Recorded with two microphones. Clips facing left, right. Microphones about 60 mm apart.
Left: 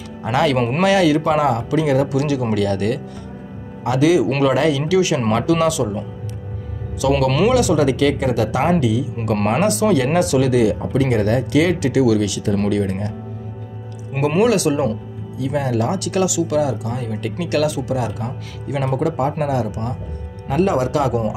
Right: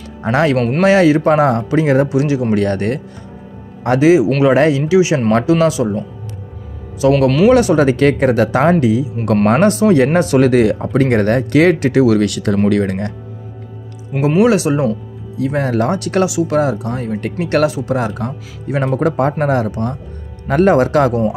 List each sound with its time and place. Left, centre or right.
0.2 s speech: right
0.6 s speech: centre
0.8 s speech: right
7.0 s speech: right
14.4 s speech: right
15.3 s speech: right